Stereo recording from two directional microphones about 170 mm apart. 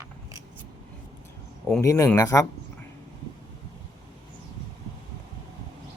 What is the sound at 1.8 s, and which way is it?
Speech, 20° left (ahead or behind).